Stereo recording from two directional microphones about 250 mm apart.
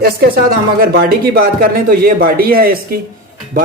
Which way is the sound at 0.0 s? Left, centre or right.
Right.